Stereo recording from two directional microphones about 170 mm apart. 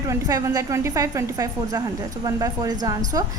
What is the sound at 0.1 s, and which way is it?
A woman's voice, 15° right (ahead or behind).